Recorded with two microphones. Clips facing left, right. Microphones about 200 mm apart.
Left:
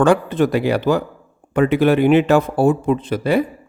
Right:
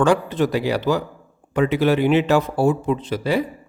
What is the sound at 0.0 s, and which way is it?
Speech, 55° left (ahead or behind).